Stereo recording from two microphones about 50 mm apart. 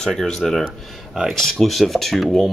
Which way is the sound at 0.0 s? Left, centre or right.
Centre.